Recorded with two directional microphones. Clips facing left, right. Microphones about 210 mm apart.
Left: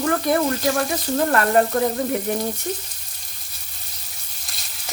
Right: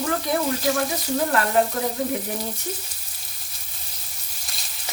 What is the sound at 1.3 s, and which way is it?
Frying, 55° left (ahead or behind).